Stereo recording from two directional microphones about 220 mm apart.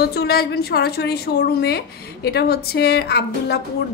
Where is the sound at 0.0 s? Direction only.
45° left (ahead or behind).